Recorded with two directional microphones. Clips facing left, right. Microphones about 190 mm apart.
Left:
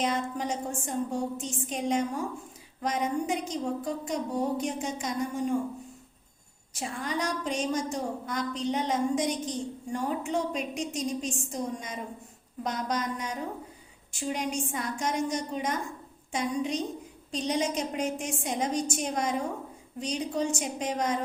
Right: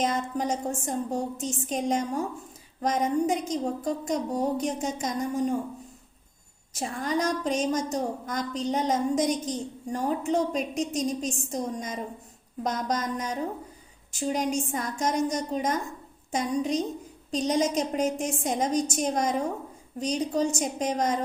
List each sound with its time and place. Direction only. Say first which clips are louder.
0.0 s a woman's voice: right 2 dB; 45° right (ahead or behind)
6.7 s a woman's voice: right 4 dB; 45° right (ahead or behind)